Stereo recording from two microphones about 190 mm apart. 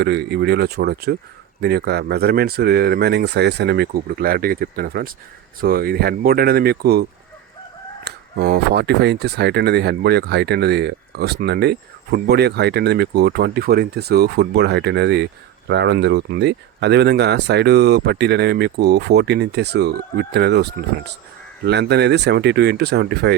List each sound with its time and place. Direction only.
0.0 s speech: 60° right (ahead or behind)
8.0 s speech: 55° right (ahead or behind)